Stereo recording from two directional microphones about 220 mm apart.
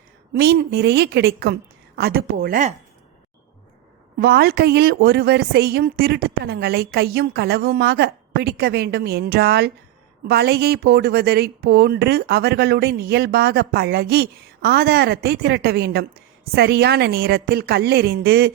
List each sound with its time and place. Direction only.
0.3 s a woman's voice: 45° right (ahead or behind)
4.2 s a woman's voice: 45° right (ahead or behind)